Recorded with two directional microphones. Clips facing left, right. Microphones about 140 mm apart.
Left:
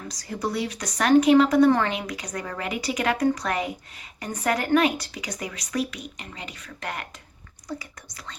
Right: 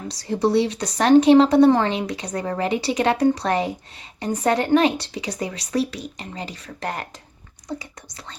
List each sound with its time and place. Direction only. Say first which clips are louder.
0.1 s a woman's voice: right 10 dB; 30° right (ahead or behind)